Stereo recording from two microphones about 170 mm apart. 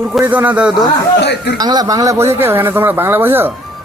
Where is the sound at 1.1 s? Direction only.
80° left.